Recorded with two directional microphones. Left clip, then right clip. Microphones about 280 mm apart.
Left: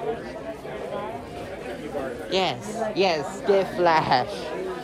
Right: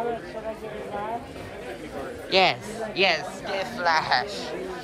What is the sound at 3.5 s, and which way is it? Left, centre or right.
Speech, left.